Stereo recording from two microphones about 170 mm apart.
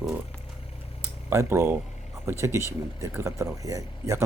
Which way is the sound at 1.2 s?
15° right (ahead or behind).